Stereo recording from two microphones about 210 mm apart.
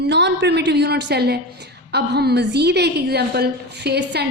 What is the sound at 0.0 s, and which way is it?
A woman's voice, 55° right (ahead or behind).